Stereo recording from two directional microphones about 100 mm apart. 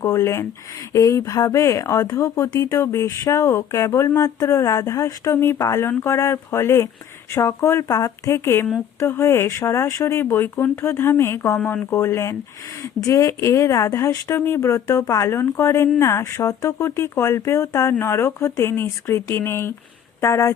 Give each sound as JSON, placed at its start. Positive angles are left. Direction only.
{"t": 0.0, "sound": "speech", "side_deg": 25}